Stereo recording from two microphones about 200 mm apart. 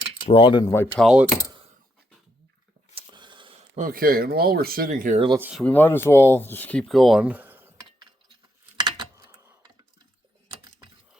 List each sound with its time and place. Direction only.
0.3 s speech: 25° left (ahead or behind)
1.0 s speech: 5° right (ahead or behind)
2.9 s a sound: 25° right (ahead or behind)
3.8 s speech: 45° right (ahead or behind)
5.4 s speech: 5° right (ahead or behind)
5.6 s speech: 10° left (ahead or behind); by 7.7 s 10° right (ahead or behind)
8.8 s a sound: 20° right (ahead or behind)